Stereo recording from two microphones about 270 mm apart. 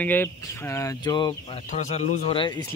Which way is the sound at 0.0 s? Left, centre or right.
Centre.